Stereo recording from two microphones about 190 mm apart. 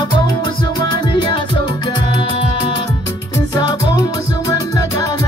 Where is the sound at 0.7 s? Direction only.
25° left (ahead or behind).